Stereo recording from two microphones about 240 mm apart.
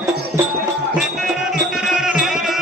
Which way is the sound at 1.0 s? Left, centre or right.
Centre.